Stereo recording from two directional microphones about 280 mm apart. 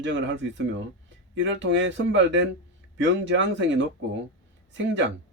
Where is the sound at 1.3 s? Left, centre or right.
Right.